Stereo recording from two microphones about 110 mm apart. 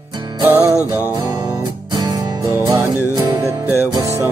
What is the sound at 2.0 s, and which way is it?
Music, 35° right (ahead or behind).